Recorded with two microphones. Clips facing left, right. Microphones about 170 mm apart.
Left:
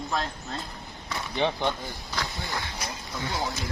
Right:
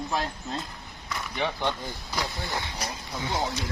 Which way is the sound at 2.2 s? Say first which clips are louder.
Right 2 dB; 20° right (ahead or behind).